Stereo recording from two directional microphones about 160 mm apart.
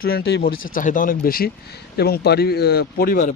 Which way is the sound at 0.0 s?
85° left.